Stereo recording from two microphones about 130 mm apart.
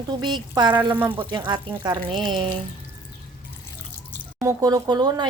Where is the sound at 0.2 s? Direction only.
35° right (ahead or behind).